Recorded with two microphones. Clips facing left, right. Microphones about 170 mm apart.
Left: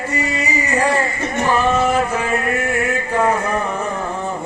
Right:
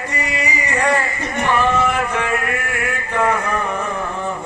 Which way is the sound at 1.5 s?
30° left (ahead or behind).